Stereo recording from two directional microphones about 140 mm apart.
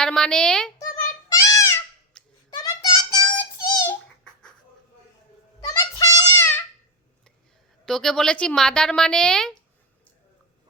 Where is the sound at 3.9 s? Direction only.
5° left (ahead or behind).